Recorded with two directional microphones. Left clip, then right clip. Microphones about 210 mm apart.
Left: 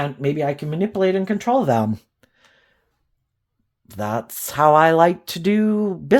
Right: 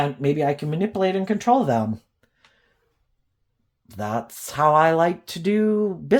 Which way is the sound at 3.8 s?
35° left (ahead or behind).